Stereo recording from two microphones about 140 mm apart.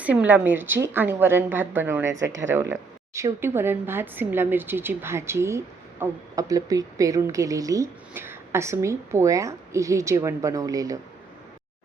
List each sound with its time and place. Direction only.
0.0 s a woman's voice: 10° right (ahead or behind)